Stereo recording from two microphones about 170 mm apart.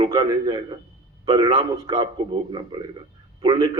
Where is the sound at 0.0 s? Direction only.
25° right (ahead or behind).